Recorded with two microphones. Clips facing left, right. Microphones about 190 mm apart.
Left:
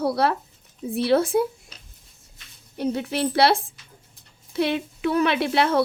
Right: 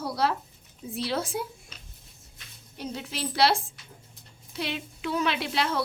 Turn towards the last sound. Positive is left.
turn(degrees=55)  # may be behind; listen again after turning